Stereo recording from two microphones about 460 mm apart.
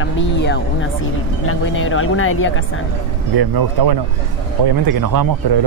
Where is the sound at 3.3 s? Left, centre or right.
Right.